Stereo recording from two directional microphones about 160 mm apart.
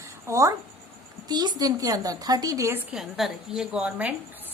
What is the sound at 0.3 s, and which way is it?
A woman's voice, 20° right (ahead or behind).